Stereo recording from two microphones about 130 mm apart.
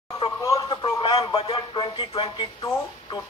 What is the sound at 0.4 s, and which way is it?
Radio, 25° left (ahead or behind).